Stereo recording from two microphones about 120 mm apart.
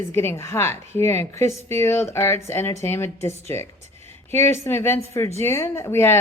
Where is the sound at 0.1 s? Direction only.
20° left (ahead or behind).